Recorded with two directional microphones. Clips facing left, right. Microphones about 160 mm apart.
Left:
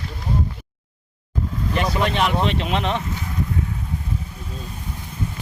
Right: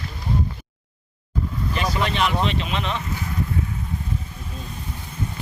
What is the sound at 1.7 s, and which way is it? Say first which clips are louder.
Speech: left 3 dB; 50° left (ahead or behind).